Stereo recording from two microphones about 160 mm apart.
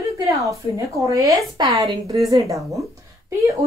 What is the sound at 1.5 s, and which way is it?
Speech, 35° right (ahead or behind).